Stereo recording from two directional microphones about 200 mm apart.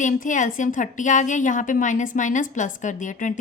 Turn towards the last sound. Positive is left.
turn(degrees=40)  # may be behind; listen again after turning